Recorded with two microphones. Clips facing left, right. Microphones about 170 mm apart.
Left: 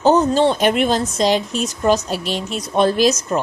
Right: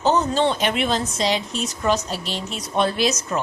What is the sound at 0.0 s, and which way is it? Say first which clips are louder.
A woman's voice: left 5 dB; 40° left (ahead or behind).